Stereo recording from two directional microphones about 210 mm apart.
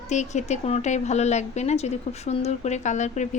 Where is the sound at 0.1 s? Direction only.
35° left (ahead or behind).